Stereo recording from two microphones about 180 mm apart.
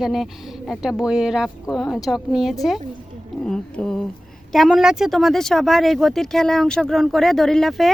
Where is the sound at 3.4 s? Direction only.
5° left (ahead or behind).